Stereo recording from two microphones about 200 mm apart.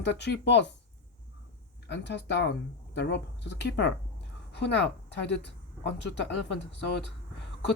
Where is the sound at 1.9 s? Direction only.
60° left (ahead or behind).